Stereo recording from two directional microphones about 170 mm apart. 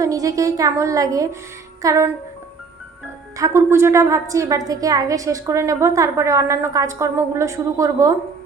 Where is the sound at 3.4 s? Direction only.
15° right (ahead or behind).